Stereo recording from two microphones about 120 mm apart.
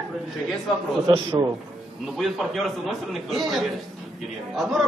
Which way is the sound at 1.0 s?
45° right (ahead or behind).